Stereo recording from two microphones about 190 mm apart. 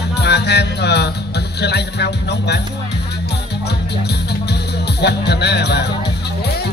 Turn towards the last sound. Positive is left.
turn(degrees=60)  # may be behind; listen again after turning